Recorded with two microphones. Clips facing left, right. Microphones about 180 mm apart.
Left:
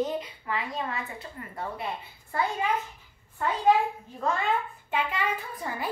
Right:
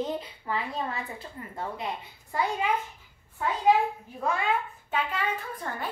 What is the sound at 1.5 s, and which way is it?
Speech, 20° right (ahead or behind).